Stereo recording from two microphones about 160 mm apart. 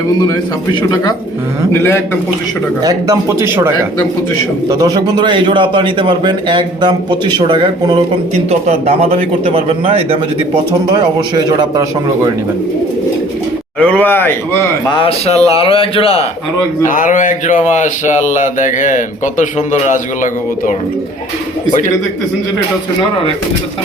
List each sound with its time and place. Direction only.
0.2 s speech: 25° left (ahead or behind)
1.7 s speech: 15° left (ahead or behind)
2.8 s speech: 20° right (ahead or behind)
4.7 s a man's voice: 25° right (ahead or behind)
8.4 s speech: 40° right (ahead or behind)
11.3 s a man's voice: 25° right (ahead or behind)
13.7 s speech: 10° left (ahead or behind)
14.9 s speech: 35° left (ahead or behind)
16.8 s speech: 55° left (ahead or behind)